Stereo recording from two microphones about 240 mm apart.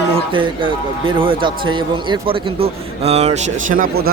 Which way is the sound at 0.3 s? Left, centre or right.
Right.